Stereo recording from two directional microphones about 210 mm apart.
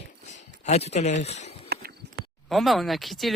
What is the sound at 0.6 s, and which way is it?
Speech, 30° left (ahead or behind).